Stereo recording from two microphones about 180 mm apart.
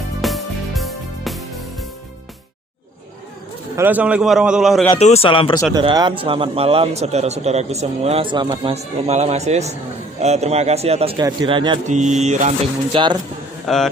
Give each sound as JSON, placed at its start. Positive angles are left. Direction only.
{"t": 0.2, "sound": "music", "side_deg": 0}
{"t": 3.8, "sound": "a man's voice", "side_deg": -10}
{"t": 4.9, "sound": "speech", "side_deg": 35}
{"t": 5.7, "sound": "speech", "side_deg": -20}
{"t": 11.9, "sound": "speech", "side_deg": -40}
{"t": 13.7, "sound": "a man's voice", "side_deg": 0}